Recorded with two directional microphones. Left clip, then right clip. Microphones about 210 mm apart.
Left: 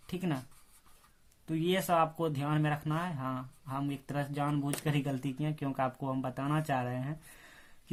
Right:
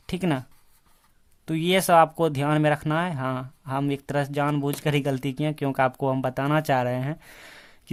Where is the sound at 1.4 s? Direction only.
45° right (ahead or behind).